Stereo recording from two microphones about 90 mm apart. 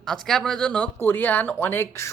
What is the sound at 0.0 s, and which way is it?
Speech, 5° left (ahead or behind).